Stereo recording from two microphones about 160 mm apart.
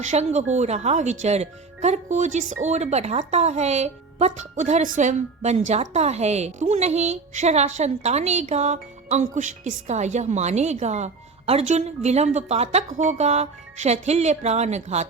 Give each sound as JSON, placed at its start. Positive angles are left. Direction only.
{"t": 0.0, "sound": "speech", "side_deg": -45}